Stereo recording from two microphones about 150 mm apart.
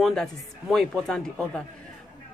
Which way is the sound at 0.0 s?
5° left (ahead or behind).